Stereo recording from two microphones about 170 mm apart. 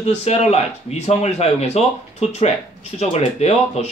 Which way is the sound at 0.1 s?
40° left (ahead or behind).